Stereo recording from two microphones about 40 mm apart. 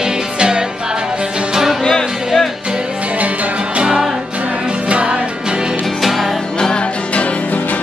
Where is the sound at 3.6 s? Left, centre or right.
Right.